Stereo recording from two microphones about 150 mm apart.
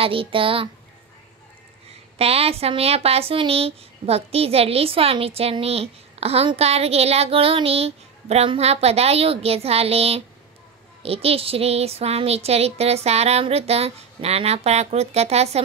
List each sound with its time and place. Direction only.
0.0 s speech: 35° right (ahead or behind)
2.1 s speech: 40° right (ahead or behind)
11.0 s a sound: 40° right (ahead or behind)